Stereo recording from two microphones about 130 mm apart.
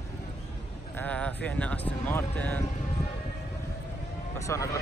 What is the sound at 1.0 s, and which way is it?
Speech, 10° left (ahead or behind).